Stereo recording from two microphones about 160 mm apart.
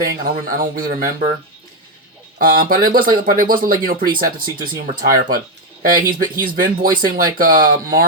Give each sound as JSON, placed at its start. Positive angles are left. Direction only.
{"t": 0.0, "sound": "speech", "side_deg": -65}
{"t": 2.4, "sound": "speech", "side_deg": -65}